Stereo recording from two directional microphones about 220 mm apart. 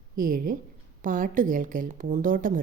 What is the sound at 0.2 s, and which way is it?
A woman's voice, 40° right (ahead or behind).